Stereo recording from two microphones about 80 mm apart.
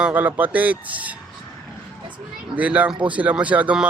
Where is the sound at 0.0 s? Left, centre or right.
Right.